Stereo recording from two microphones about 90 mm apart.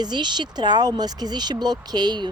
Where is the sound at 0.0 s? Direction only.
55° right (ahead or behind).